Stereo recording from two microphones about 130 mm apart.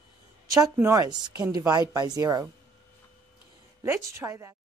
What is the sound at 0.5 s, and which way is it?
A woman's voice, 25° right (ahead or behind).